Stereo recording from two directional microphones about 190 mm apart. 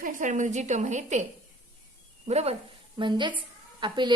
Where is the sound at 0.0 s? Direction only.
40° right (ahead or behind).